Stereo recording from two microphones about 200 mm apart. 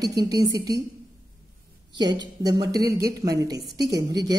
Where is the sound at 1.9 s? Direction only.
20° right (ahead or behind).